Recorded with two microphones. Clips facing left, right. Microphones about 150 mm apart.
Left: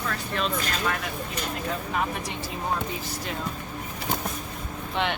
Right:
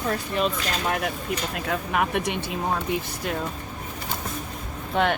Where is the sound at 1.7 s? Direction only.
65° right (ahead or behind).